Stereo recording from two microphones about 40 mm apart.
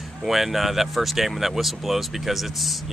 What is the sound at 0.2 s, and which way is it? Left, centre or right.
Speech, centre.